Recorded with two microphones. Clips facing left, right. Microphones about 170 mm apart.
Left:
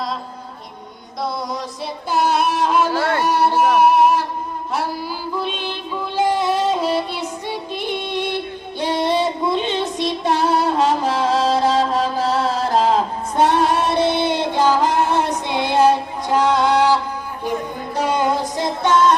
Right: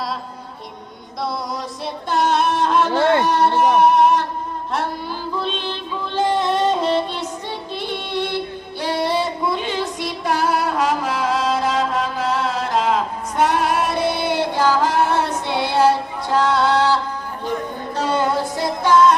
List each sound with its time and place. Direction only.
1.8 s female singing: 5° left (ahead or behind)
2.9 s a sound: 25° right (ahead or behind)
3.2 s speech: 10° left (ahead or behind)
3.8 s music: 5° left (ahead or behind)
4.7 s female singing: 5° left (ahead or behind)
8.8 s child singing: 20° left (ahead or behind)
17.9 s music: 15° left (ahead or behind)